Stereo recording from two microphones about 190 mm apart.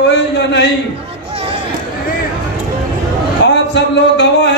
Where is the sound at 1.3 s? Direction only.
30° right (ahead or behind).